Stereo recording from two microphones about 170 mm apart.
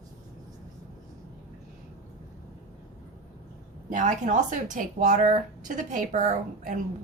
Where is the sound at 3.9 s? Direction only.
50° right (ahead or behind).